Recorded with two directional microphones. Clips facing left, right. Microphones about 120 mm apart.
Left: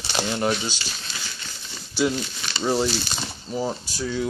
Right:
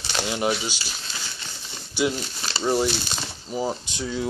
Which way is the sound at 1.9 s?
10° right (ahead or behind).